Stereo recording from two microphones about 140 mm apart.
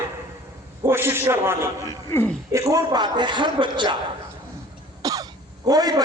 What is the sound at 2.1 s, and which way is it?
Speech, 15° left (ahead or behind).